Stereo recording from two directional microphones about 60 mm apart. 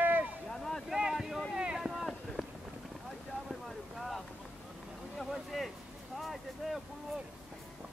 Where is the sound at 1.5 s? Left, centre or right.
Centre.